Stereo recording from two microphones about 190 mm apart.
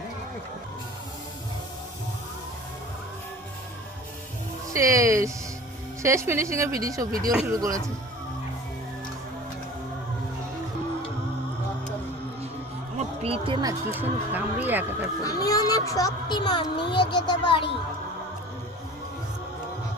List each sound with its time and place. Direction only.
4.7 s speech: 15° right (ahead or behind)
13.0 s speech: 30° right (ahead or behind); by 15.1 s 10° right (ahead or behind)
15.2 s speech: 20° left (ahead or behind)